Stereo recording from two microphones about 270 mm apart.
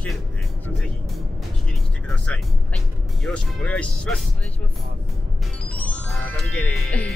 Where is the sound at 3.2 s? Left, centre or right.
Centre.